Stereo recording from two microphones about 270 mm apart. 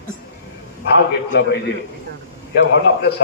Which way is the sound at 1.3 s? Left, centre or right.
Left.